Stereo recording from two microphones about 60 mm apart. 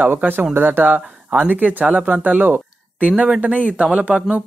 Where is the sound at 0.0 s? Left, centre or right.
Right.